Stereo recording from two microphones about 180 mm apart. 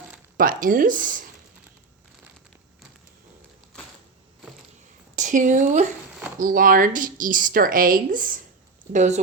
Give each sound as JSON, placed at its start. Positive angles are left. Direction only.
{"t": 0.3, "sound": "speech", "side_deg": -50}
{"t": 3.7, "sound": "a sound", "side_deg": 5}
{"t": 5.1, "sound": "speech", "side_deg": -45}